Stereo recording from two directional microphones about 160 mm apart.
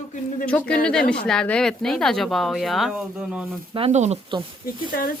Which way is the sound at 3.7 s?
40° right (ahead or behind).